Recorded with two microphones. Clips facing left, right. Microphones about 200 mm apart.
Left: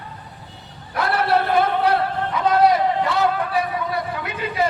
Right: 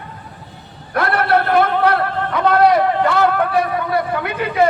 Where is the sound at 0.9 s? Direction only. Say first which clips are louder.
Right 3 dB; 60° right (ahead or behind).